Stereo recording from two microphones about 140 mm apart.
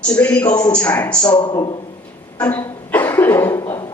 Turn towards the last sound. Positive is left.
turn(degrees=20)  # may be behind; listen again after turning